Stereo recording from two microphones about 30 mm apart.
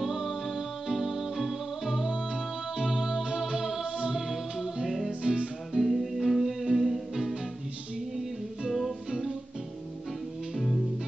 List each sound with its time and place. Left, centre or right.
0.0 s music: centre
2.8 s music: centre
4.8 s music: centre
5.2 s music: right
5.7 s music: centre
8.8 s music: centre
10.5 s music: centre